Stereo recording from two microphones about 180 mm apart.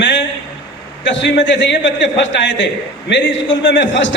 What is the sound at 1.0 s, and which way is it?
A man's voice, 85° left.